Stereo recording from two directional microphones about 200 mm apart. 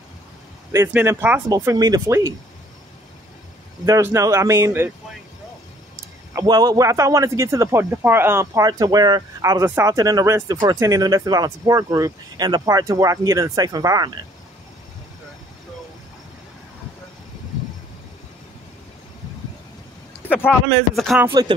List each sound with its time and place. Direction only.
0.7 s a man's voice: 15° right (ahead or behind)
3.8 s a man's voice: 15° right (ahead or behind)
6.3 s a man's voice: 20° right (ahead or behind)
20.3 s a man's voice: 5° left (ahead or behind)
21.3 s speech: 20° right (ahead or behind)